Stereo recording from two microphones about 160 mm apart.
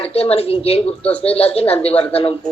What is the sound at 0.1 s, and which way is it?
A woman's voice, 40° left (ahead or behind).